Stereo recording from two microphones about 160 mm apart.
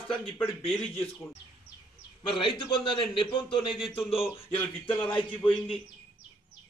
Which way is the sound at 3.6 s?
Centre (ahead or behind).